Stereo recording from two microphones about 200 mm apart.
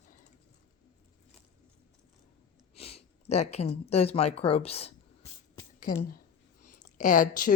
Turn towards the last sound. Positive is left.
turn(degrees=40)  # may be behind; listen again after turning